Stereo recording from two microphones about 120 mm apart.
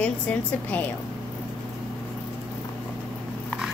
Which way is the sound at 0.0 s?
10° left (ahead or behind).